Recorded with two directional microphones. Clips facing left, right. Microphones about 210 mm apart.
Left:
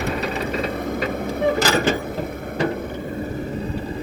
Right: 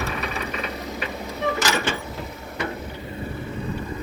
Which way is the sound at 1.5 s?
35° left (ahead or behind).